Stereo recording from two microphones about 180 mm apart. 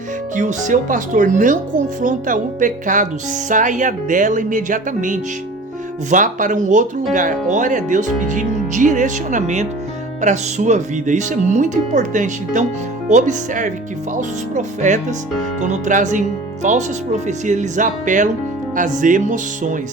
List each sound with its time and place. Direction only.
0.3 s speech: 45° right (ahead or behind)